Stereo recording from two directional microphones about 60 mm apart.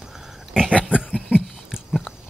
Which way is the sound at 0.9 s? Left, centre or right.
Centre.